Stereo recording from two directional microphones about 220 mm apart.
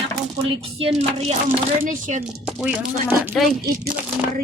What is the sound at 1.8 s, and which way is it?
Speech, 35° right (ahead or behind).